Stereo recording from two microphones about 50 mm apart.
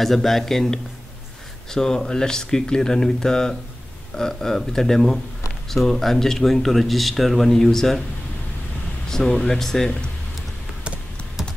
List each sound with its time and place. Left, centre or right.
0.0 s speech: centre
9.1 s speech: centre
11.4 s typing: centre